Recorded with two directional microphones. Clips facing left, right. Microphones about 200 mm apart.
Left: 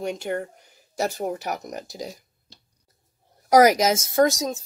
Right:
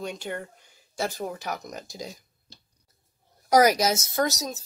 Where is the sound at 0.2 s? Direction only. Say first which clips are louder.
Left 6 dB; 45° left (ahead or behind).